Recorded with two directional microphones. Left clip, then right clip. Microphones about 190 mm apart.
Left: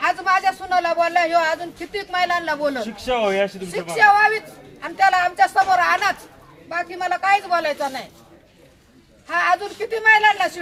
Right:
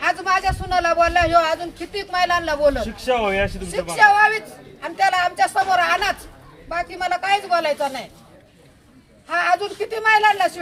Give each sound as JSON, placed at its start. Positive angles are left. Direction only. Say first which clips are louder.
{"t": 0.0, "sound": "speech", "louder": "left 1 dB", "side_deg": 0}
{"t": 2.8, "sound": "speech", "louder": "even", "side_deg": 15}
{"t": 3.9, "sound": "speech", "louder": "even", "side_deg": 0}
{"t": 9.3, "sound": "speech", "louder": "even", "side_deg": 0}